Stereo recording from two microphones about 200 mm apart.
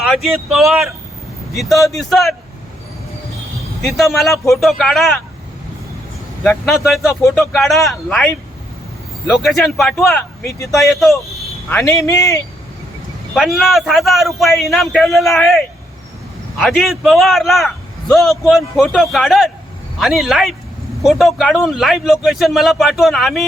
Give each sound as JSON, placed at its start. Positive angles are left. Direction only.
{"t": 0.0, "sound": "a man's voice", "side_deg": 0}
{"t": 3.8, "sound": "a man's voice", "side_deg": 0}
{"t": 6.4, "sound": "a man's voice", "side_deg": 0}
{"t": 9.3, "sound": "a man's voice", "side_deg": 0}
{"t": 10.4, "sound": "a man's voice", "side_deg": 15}
{"t": 10.8, "sound": "a man's voice", "side_deg": 0}
{"t": 11.7, "sound": "a man's voice", "side_deg": 15}
{"t": 13.3, "sound": "a man's voice", "side_deg": 0}